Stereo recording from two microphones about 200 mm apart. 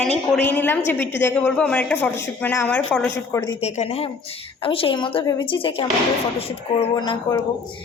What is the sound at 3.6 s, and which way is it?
A woman's voice, 30° left (ahead or behind).